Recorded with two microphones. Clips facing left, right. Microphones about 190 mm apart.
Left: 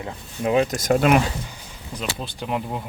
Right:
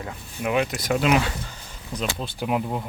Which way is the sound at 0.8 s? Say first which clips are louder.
Left 3 dB; 45° left (ahead or behind).